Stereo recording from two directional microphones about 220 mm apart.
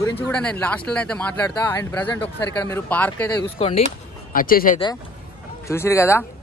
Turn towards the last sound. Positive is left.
turn(degrees=10)  # may be behind; listen again after turning